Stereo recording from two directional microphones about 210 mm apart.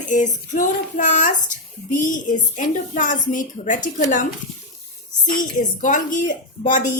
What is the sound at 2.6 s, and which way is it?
Speech, 35° left (ahead or behind).